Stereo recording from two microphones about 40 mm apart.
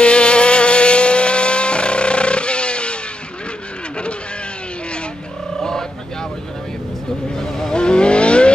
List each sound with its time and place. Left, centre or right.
0.0 s vehicle: left
5.6 s a sound: centre
7.3 s vehicle: centre
7.7 s vehicle: left